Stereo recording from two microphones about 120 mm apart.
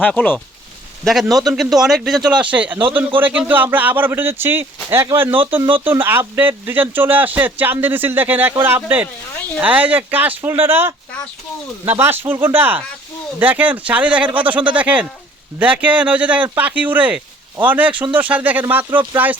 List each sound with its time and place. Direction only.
0.1 s speech: 10° left (ahead or behind)
1.0 s a man's voice: centre (ahead or behind)